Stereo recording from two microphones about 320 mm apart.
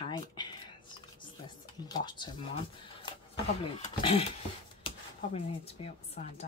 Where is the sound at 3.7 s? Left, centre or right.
Centre.